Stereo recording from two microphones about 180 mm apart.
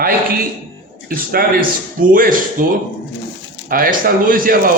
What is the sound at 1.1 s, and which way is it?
A man's voice, 55° right (ahead or behind).